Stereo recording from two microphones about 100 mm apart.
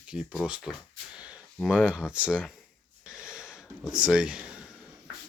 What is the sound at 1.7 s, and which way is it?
Speech, 10° right (ahead or behind).